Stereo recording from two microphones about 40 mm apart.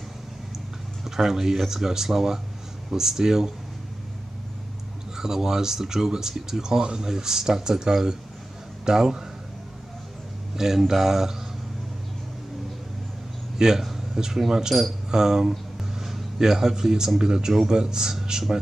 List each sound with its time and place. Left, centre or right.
1.0 s speech: centre
5.1 s speech: centre
10.5 s speech: centre
13.6 s a man's voice: centre